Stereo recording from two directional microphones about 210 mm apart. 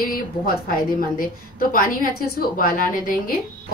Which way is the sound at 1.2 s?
45° left (ahead or behind).